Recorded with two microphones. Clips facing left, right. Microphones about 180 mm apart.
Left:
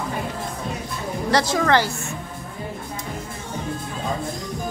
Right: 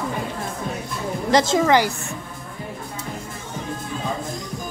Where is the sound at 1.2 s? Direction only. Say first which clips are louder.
Right 2 dB; 20° right (ahead or behind).